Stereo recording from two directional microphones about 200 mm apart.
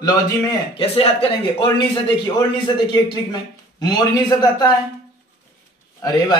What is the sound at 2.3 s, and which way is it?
A man's voice, 20° left (ahead or behind).